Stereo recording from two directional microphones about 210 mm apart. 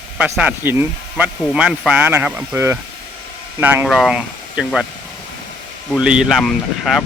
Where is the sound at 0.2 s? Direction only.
5° right (ahead or behind).